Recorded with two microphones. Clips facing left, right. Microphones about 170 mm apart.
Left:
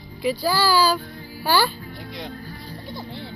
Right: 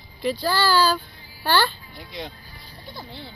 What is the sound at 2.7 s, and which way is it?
Music, 55° left (ahead or behind).